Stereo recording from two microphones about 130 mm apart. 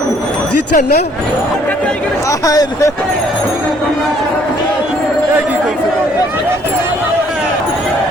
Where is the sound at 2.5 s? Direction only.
25° left (ahead or behind).